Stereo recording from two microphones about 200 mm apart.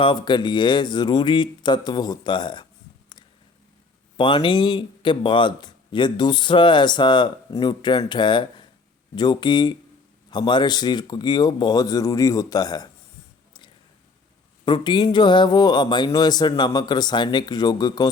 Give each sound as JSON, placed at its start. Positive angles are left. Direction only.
{"t": 0.0, "sound": "speech", "side_deg": 25}
{"t": 4.2, "sound": "speech", "side_deg": 25}
{"t": 14.6, "sound": "speech", "side_deg": 20}